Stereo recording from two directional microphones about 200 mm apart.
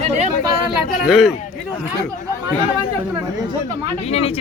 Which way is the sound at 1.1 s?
Centre (ahead or behind).